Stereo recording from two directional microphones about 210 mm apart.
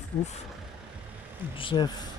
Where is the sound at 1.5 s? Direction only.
25° left (ahead or behind).